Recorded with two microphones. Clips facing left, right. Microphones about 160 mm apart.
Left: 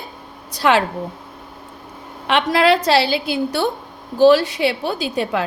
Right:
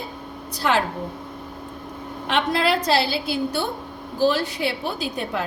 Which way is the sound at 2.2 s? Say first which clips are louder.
Left 6 dB; 90° left.